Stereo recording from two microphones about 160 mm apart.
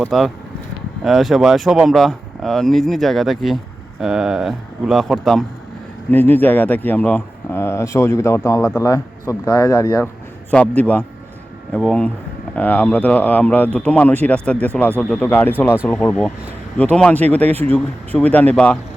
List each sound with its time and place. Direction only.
0.0 s speech: centre (ahead or behind)
6.1 s speech: 10° left (ahead or behind)